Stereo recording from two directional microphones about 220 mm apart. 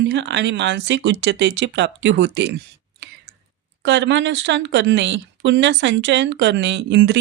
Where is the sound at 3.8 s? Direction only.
50° right (ahead or behind).